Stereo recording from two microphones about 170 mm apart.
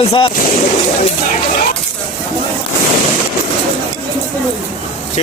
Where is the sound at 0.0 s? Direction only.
35° left (ahead or behind).